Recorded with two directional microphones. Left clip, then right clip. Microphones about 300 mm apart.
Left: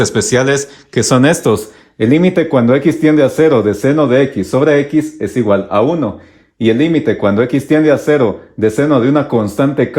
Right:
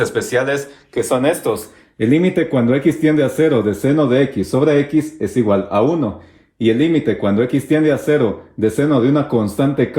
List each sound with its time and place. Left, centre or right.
0.0 s speech: left
1.2 s speech: left
2.0 s speech: left
4.9 s speech: centre
5.3 s speech: centre